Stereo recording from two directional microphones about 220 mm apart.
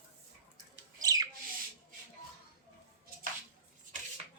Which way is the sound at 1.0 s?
15° right (ahead or behind).